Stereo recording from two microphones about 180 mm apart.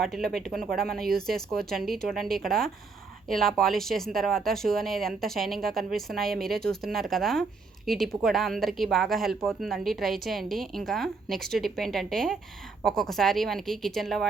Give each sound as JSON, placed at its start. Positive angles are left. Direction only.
{"t": 0.3, "sound": "speech", "side_deg": 0}